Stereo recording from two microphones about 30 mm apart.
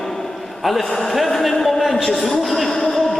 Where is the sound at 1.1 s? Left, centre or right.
Centre.